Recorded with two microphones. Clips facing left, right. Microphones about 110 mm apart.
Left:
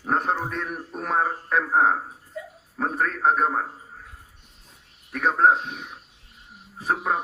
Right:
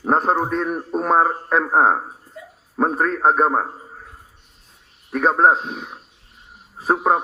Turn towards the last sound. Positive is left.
turn(degrees=-45)  # may be behind; listen again after turning